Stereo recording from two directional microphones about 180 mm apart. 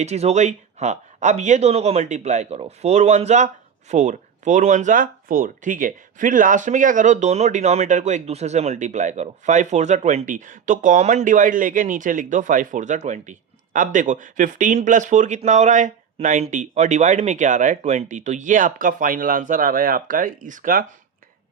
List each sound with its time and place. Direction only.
0.0 s speech: 40° right (ahead or behind)